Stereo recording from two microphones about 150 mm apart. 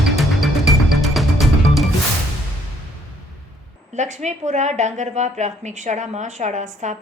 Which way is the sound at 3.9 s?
50° right (ahead or behind).